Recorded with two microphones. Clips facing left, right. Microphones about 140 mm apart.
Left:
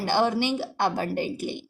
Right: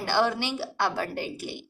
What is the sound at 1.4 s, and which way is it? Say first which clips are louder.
Speech: left 5 dB; 20° left (ahead or behind).